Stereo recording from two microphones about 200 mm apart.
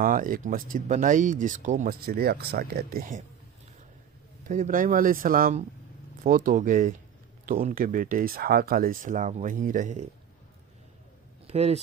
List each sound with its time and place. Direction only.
0.0 s speech: 45° right (ahead or behind)
2.0 s speech: 50° right (ahead or behind)
4.5 s speech: 40° right (ahead or behind)
11.4 s speech: 30° right (ahead or behind)